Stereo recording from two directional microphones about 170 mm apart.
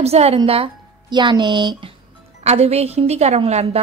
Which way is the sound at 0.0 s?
40° right (ahead or behind).